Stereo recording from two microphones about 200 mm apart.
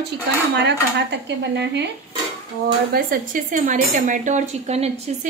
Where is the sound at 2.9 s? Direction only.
45° right (ahead or behind).